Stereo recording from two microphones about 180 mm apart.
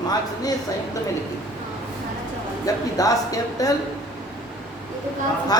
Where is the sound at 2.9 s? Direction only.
20° left (ahead or behind).